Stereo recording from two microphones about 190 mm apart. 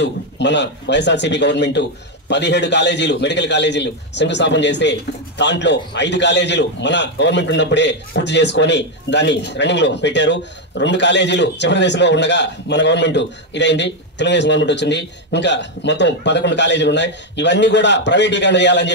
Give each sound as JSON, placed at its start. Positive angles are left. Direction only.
{"t": 0.0, "sound": "a man's voice", "side_deg": 65}